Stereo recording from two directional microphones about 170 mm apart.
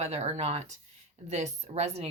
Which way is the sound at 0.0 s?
40° right (ahead or behind).